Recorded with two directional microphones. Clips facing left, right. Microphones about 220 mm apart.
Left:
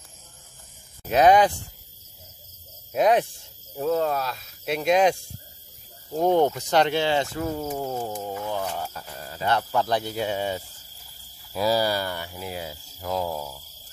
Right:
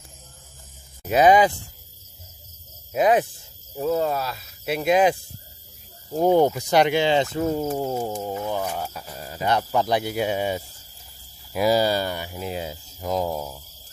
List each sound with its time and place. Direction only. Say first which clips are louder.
1.0 s speech: right 1 dB; centre (ahead or behind)
2.9 s speech: right 1 dB; centre (ahead or behind); by 13.6 s 20° right (ahead or behind)